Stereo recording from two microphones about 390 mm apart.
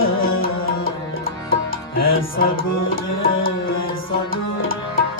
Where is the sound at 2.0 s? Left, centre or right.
Left.